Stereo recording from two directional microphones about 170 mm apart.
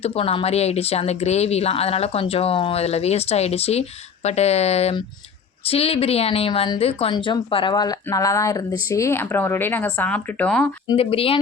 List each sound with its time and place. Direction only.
0.0 s speech: 35° left (ahead or behind); by 10.7 s 5° left (ahead or behind)
10.9 s speech: 35° left (ahead or behind)